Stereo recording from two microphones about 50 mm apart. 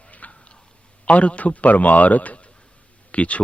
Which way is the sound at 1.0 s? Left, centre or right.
Left.